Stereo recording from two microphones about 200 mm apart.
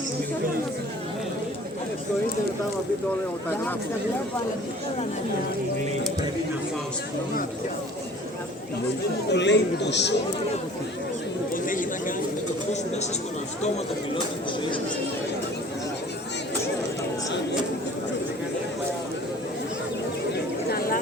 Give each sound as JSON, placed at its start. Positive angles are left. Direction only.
{"t": 9.3, "sound": "speech", "side_deg": 60}
{"t": 11.5, "sound": "chatter", "side_deg": 40}
{"t": 20.7, "sound": "vehicle", "side_deg": 50}